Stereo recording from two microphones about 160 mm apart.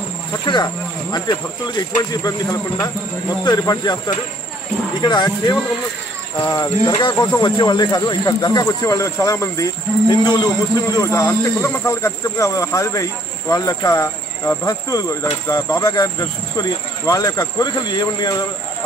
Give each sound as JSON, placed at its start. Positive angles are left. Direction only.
{"t": 1.1, "sound": "speech", "side_deg": 25}
{"t": 3.4, "sound": "speech", "side_deg": 25}